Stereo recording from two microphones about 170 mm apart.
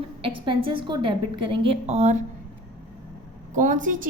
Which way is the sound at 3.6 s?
50° right (ahead or behind).